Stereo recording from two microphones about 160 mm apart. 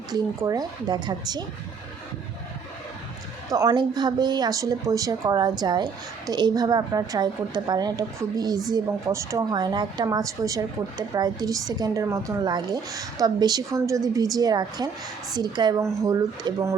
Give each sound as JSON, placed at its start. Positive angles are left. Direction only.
{"t": 0.1, "sound": "a woman's voice", "side_deg": -25}
{"t": 3.5, "sound": "a woman's voice", "side_deg": -25}